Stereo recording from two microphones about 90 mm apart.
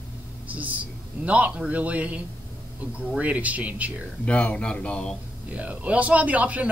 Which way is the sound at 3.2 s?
15° right (ahead or behind).